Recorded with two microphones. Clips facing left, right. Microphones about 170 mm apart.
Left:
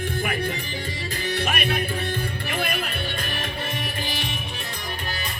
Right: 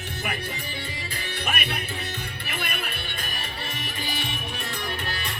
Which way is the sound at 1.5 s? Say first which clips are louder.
Left 1 dB; 50° left (ahead or behind).